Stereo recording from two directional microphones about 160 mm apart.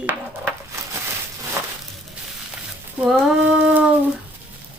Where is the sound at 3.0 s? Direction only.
5° right (ahead or behind).